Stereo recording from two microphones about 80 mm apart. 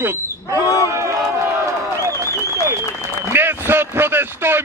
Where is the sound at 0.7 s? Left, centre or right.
Left.